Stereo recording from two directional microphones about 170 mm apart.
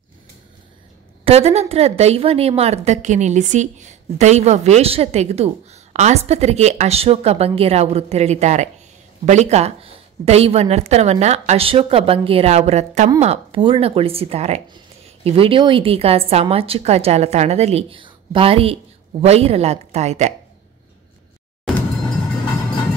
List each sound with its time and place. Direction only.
1.2 s a woman's voice: 35° right (ahead or behind)